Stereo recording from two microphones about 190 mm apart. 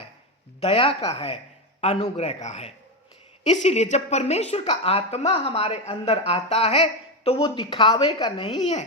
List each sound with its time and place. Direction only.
0.6 s a woman's voice: 30° left (ahead or behind)